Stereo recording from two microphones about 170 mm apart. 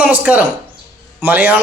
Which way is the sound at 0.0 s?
10° right (ahead or behind).